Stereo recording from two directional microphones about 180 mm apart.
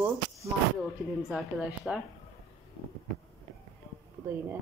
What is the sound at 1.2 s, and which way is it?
Speech, centre (ahead or behind).